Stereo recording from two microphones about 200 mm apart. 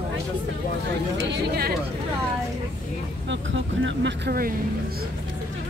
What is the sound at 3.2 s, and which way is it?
Vehicle, 65° right (ahead or behind).